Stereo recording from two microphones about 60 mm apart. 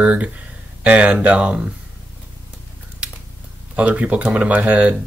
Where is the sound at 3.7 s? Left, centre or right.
Right.